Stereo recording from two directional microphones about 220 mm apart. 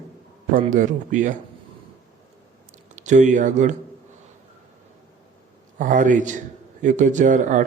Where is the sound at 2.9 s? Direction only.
35° right (ahead or behind).